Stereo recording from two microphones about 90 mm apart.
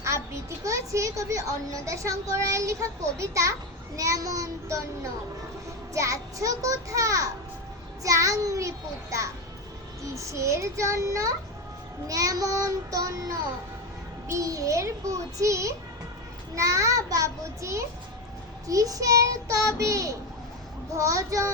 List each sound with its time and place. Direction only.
0.0 s a child's voice: 30° right (ahead or behind)
5.9 s a child's voice: 35° right (ahead or behind)